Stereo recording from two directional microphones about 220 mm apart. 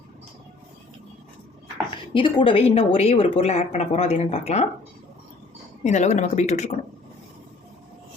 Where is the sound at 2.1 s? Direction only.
20° left (ahead or behind).